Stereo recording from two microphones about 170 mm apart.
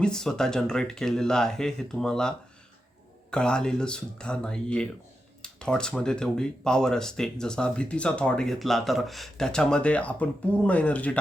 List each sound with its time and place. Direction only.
0.0 s speech: 5° left (ahead or behind)
3.3 s speech: 5° left (ahead or behind)